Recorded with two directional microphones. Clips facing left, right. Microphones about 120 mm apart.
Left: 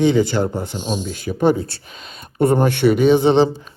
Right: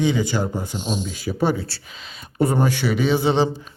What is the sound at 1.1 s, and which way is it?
Speech, 50° left (ahead or behind).